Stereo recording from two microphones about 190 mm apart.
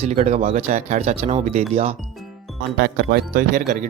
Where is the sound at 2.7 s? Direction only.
55° right (ahead or behind); by 3.8 s 40° right (ahead or behind).